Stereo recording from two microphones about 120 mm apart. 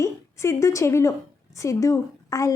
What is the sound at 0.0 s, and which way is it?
A woman's voice, 25° left (ahead or behind).